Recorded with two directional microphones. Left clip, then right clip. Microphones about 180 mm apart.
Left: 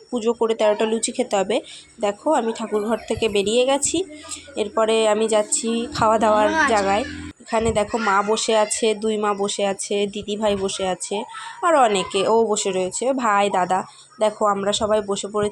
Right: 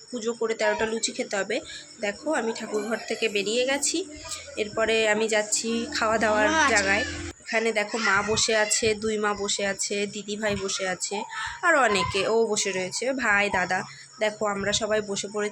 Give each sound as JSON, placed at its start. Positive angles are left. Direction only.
{"t": 0.1, "sound": "speech", "side_deg": 25}
{"t": 10.2, "sound": "speech", "side_deg": -10}
{"t": 11.2, "sound": "speech", "side_deg": 25}